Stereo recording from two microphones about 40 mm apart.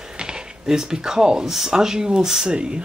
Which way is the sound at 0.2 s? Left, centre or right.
Centre.